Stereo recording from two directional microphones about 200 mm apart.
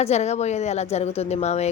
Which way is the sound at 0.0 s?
35° left (ahead or behind).